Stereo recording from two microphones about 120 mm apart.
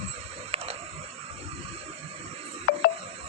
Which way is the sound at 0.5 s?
55° right (ahead or behind).